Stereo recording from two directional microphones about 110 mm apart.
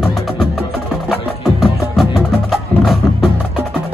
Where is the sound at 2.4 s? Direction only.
Centre (ahead or behind).